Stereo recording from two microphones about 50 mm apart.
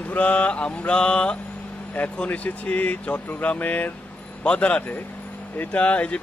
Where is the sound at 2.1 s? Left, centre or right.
Left.